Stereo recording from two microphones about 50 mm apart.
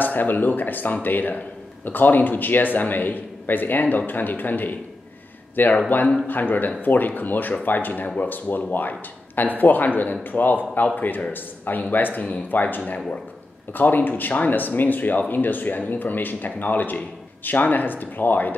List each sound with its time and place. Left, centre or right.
0.0 s a man's voice: left
5.9 s a man's voice: left